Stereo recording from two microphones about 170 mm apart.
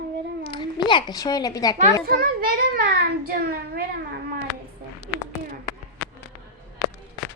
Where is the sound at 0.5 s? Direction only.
25° left (ahead or behind).